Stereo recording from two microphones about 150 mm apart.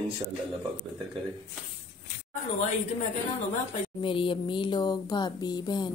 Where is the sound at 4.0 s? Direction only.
35° left (ahead or behind).